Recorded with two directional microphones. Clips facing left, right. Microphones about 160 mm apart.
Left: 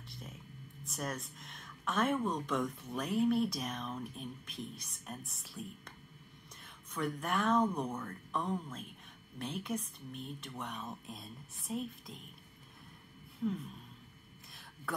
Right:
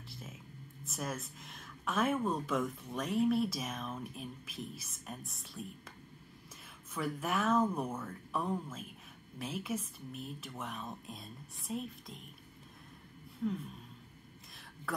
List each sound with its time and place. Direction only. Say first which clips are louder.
0.1 s whispering: even; centre (ahead or behind)
0.8 s speech: even; centre (ahead or behind)
13.4 s speech: even; centre (ahead or behind)
14.5 s throat clearing: right 1 dB; centre (ahead or behind)